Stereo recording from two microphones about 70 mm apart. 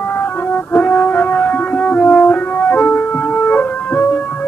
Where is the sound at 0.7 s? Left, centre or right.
Left.